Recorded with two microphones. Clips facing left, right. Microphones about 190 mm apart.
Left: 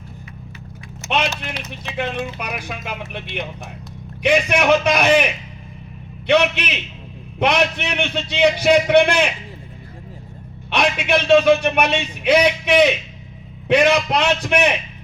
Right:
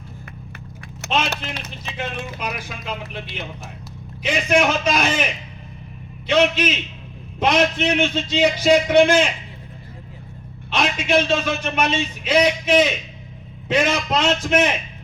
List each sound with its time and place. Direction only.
1.8 s a man's voice: 65° left (ahead or behind)
10.7 s a man's voice: 65° left (ahead or behind)